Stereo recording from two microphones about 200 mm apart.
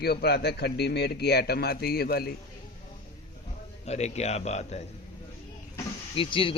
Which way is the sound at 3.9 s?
35° left (ahead or behind).